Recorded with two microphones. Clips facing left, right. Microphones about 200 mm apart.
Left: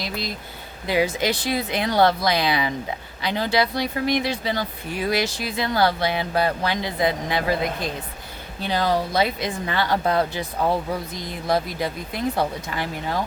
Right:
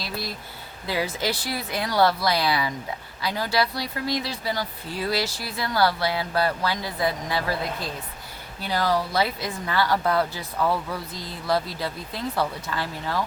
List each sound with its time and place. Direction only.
0.0 s speech: 20° left (ahead or behind)